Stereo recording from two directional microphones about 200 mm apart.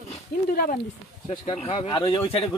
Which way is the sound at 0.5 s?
45° left (ahead or behind).